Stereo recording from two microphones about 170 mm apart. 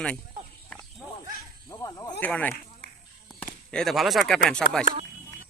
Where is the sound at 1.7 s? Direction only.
20° left (ahead or behind).